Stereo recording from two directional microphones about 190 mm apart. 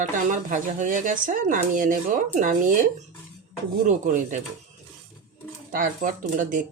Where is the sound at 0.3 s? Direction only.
45° right (ahead or behind).